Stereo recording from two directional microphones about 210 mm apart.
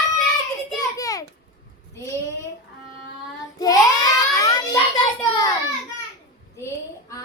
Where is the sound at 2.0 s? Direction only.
15° left (ahead or behind).